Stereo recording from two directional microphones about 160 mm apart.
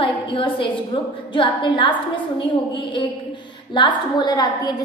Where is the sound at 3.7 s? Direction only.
30° left (ahead or behind).